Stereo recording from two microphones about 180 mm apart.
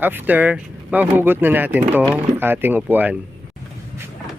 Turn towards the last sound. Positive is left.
turn(degrees=-10)  # may be behind; listen again after turning